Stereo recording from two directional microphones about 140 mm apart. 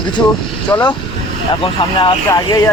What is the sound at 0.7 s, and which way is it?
Speech, 20° left (ahead or behind).